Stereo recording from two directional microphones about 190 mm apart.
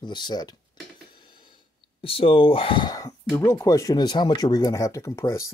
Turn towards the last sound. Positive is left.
turn(degrees=15)  # may be behind; listen again after turning